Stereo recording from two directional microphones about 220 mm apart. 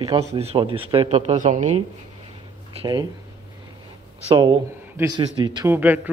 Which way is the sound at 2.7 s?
20° right (ahead or behind).